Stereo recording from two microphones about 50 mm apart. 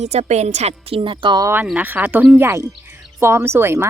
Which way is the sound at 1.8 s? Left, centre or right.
Right.